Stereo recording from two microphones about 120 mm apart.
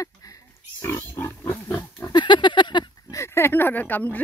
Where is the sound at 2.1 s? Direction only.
40° left (ahead or behind).